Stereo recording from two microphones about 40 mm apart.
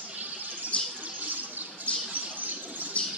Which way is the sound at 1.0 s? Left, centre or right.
Right.